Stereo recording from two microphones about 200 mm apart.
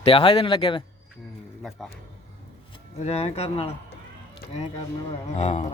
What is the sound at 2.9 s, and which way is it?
Speech, 30° left (ahead or behind).